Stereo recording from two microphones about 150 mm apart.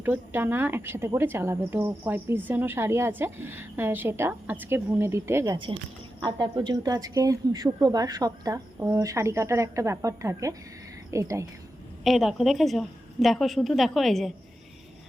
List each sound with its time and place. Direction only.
0.0 s a woman's voice: 15° right (ahead or behind)
6.2 s a woman's voice: 30° right (ahead or behind)
12.0 s a woman's voice: centre (ahead or behind)